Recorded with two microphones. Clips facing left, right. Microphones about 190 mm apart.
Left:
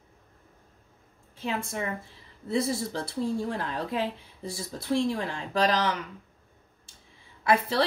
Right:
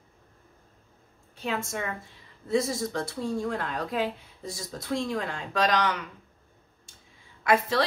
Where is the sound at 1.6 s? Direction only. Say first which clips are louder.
Left 1 dB; 30° left (ahead or behind).